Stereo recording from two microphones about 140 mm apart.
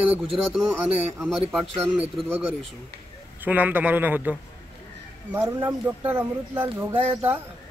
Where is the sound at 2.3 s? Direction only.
15° right (ahead or behind).